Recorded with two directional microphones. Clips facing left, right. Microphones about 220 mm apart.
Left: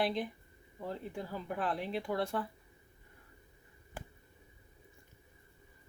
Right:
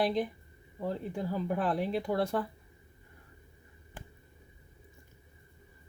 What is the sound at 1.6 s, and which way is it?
Speech, 40° right (ahead or behind).